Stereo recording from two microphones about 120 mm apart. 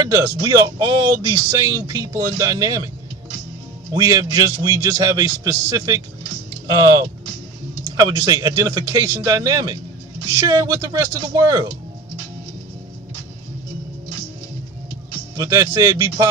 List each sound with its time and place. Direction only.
0.0 s speech: 30° right (ahead or behind)
3.9 s speech: 30° right (ahead or behind)
15.3 s speech: 30° right (ahead or behind)